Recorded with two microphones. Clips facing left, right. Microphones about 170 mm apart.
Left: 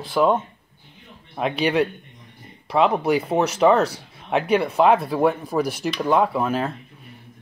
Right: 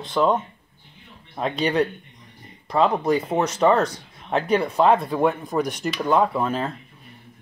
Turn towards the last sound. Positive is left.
turn(degrees=5)  # may be behind; listen again after turning